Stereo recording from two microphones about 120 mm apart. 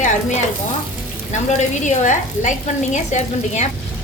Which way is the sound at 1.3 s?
85° left.